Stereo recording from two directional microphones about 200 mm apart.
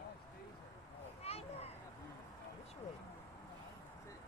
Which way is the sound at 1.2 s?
30° left (ahead or behind).